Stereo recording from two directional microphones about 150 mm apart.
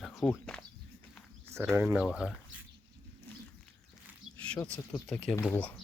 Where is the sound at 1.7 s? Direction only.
10° right (ahead or behind).